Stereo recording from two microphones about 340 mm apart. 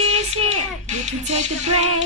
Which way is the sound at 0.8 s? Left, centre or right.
Right.